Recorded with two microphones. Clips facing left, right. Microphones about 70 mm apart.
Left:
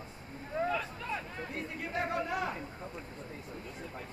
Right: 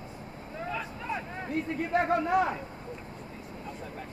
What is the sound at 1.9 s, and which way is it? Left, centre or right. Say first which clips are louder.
Speech: right 9 dB; right.